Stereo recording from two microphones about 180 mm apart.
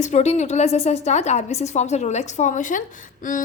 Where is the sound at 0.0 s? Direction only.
40° left (ahead or behind).